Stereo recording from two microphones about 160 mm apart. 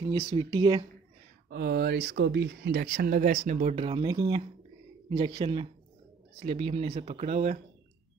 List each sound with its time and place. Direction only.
0.1 s speech: 30° right (ahead or behind)
1.5 s speech: 90° right; by 3.3 s 70° right (ahead or behind)
3.5 s speech: 35° right (ahead or behind)
4.1 s speech: 20° right (ahead or behind); by 7.5 s 45° right (ahead or behind)